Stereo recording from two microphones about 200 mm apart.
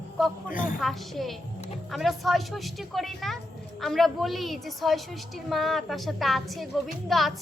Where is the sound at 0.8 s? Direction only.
Centre (ahead or behind).